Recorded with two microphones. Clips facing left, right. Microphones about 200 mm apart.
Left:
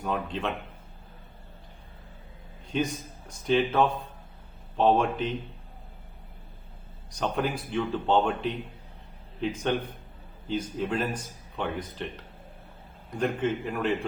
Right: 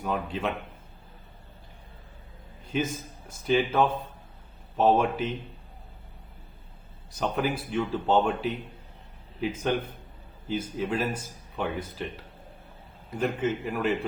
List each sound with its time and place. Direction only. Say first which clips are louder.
0.0 s a man's voice: right 1 dB; 5° right (ahead or behind)
2.7 s a man's voice: even; 5° right (ahead or behind)
7.2 s a man's voice: right 1 dB; 5° right (ahead or behind)